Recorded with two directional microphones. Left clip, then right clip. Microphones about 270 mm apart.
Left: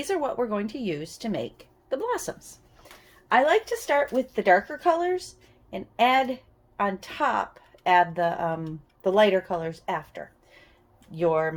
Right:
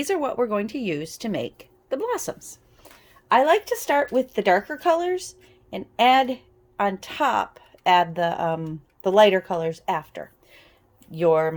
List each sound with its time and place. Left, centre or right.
0.0 s a woman's voice: right
3.2 s a woman's voice: right